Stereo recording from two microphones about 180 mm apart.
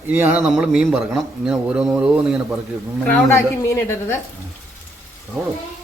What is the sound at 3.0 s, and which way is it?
A man's voice, 10° left (ahead or behind).